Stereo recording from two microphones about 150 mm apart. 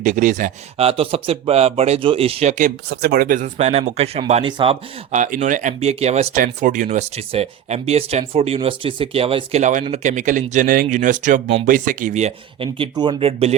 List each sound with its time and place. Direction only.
0.0 s speech: 60° right (ahead or behind)
0.8 s speech: 40° right (ahead or behind); by 3.5 s 65° right (ahead or behind)
3.6 s speech: 45° right (ahead or behind)
5.1 s speech: 55° right (ahead or behind)
6.4 s speech: 60° right (ahead or behind)
7.2 s speech: 40° right (ahead or behind)
12.6 s speech: 35° right (ahead or behind)